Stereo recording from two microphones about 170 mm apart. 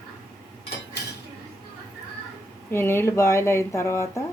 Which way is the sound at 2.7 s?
15° left (ahead or behind).